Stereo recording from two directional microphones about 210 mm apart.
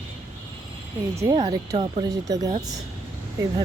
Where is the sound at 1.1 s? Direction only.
15° right (ahead or behind).